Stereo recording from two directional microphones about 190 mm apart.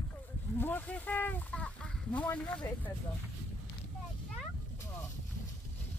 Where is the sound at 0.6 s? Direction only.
10° left (ahead or behind).